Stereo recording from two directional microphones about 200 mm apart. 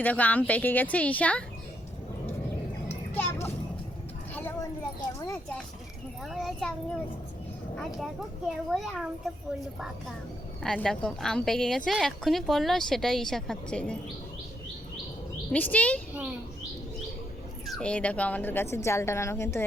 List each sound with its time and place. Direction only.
0.0 s speech: 10° left (ahead or behind)
2.9 s a sound: 10° left (ahead or behind)
4.9 s speech: 15° left (ahead or behind)
6.2 s speech: centre (ahead or behind)
8.7 s speech: centre (ahead or behind)
10.6 s speech: centre (ahead or behind)
15.5 s speech: 10° left (ahead or behind)
17.7 s speech: 5° left (ahead or behind)